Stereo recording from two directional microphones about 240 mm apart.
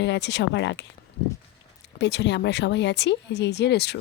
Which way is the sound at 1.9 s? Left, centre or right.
Left.